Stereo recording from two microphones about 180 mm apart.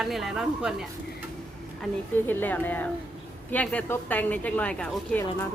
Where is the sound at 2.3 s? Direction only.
10° left (ahead or behind).